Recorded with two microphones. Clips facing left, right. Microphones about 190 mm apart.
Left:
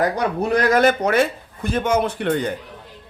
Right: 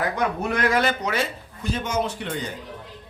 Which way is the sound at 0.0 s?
35° left (ahead or behind).